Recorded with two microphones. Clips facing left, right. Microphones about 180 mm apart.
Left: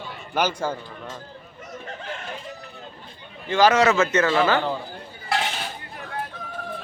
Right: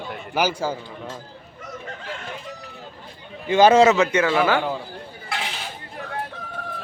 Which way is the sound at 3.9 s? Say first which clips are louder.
Right 1 dB; 15° right (ahead or behind).